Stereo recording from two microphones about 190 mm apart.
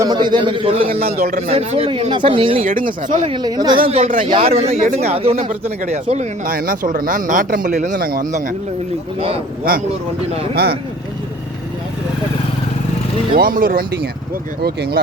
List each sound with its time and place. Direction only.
0.0 s speech: 20° right (ahead or behind)
1.0 s speech: 50° right (ahead or behind)
1.5 s speech: 30° right (ahead or behind)
2.6 s speech: 45° right (ahead or behind)
3.2 s speech: 20° right (ahead or behind)
4.1 s speech: 40° right (ahead or behind)
10.5 s speech: 55° right (ahead or behind)
13.3 s speech: 50° right (ahead or behind)